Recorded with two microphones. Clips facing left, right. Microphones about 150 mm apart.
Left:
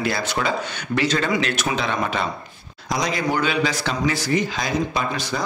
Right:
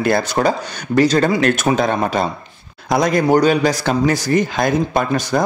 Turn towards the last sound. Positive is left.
turn(degrees=-50)  # may be behind; listen again after turning